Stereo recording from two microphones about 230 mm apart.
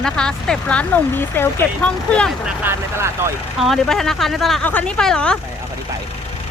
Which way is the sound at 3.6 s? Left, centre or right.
Centre.